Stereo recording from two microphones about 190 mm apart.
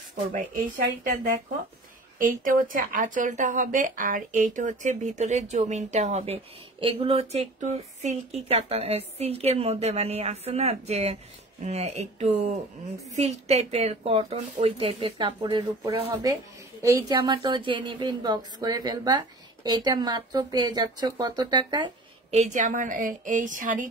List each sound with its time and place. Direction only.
0.1 s a woman's voice: 45° right (ahead or behind)
2.1 s a woman's voice: 45° right (ahead or behind); by 21.9 s 25° right (ahead or behind)
22.3 s a woman's voice: 40° right (ahead or behind)